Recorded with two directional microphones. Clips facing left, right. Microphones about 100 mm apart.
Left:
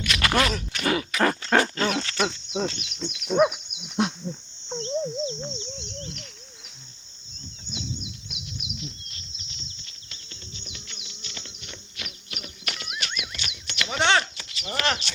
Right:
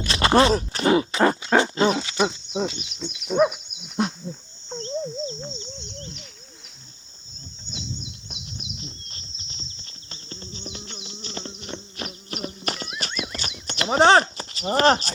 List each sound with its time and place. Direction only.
0.0 s a sound: 30° right (ahead or behind)
1.5 s pig: 20° right (ahead or behind)
2.0 s speech: 10° right (ahead or behind)
4.9 s a sound: centre (ahead or behind)
7.9 s bird: 30° right (ahead or behind)
13.0 s horse: 35° right (ahead or behind)